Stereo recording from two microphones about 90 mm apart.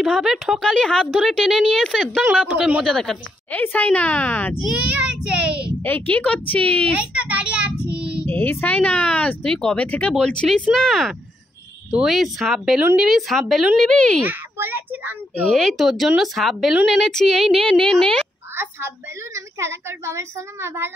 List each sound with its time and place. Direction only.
0.0 s speech: 5° right (ahead or behind)
0.7 s a woman's voice: 10° left (ahead or behind)
2.5 s speech: 10° right (ahead or behind)
2.8 s a woman's voice: 5° left (ahead or behind)
3.5 s a woman's voice: 20° left (ahead or behind)
4.6 s child singing: 5° right (ahead or behind)
5.9 s a woman's voice: 20° left (ahead or behind)
6.9 s a sound: 15° right (ahead or behind)
7.9 s child singing: 10° right (ahead or behind)
8.3 s a woman's voice: 25° left (ahead or behind)
14.2 s a child's voice: 20° right (ahead or behind)
15.4 s speech: 5° left (ahead or behind)
19.3 s a woman's voice: 30° right (ahead or behind)